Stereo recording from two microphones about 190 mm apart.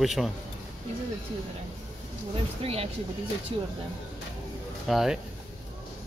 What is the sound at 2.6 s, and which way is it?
Speech, 30° right (ahead or behind).